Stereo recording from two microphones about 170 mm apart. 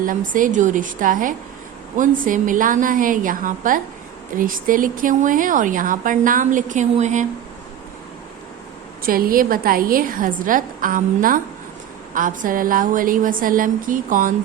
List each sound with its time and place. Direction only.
0.0 s a woman's voice: 50° right (ahead or behind)
9.0 s a woman's voice: 60° right (ahead or behind)